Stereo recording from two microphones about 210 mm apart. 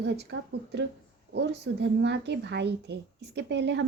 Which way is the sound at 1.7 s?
60° right (ahead or behind).